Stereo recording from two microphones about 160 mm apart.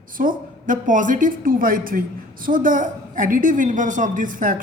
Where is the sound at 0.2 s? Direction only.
55° right (ahead or behind).